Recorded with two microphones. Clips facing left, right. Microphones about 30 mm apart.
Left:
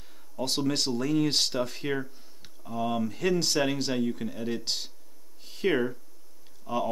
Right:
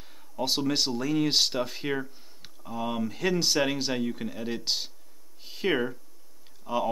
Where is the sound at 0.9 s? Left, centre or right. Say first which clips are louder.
Even; centre.